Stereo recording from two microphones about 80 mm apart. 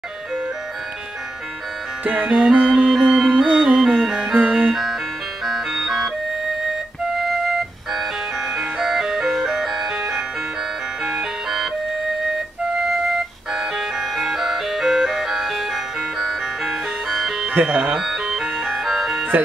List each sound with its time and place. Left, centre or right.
2.0 s music: centre
7.2 s music: centre
13.5 s ice cream truck: centre
17.5 s music: centre
17.9 s music: centre